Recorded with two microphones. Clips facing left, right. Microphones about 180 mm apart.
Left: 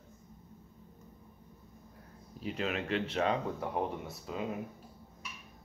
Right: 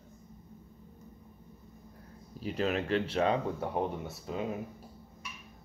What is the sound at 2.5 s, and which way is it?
Speech, 40° right (ahead or behind).